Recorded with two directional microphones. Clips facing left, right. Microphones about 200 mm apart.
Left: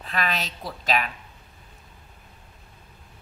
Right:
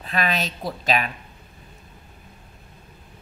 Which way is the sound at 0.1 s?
20° right (ahead or behind).